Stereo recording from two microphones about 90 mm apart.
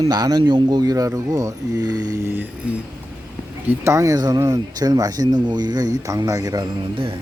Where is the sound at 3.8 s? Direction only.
35° right (ahead or behind).